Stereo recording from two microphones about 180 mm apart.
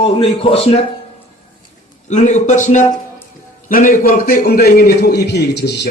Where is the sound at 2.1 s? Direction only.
40° left (ahead or behind).